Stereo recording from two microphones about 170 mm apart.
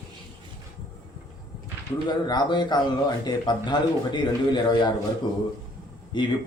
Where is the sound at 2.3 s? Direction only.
25° left (ahead or behind).